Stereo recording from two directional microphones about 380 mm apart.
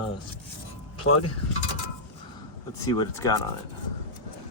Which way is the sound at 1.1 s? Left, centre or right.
Left.